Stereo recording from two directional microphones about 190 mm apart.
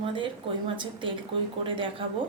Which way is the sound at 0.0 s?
25° right (ahead or behind).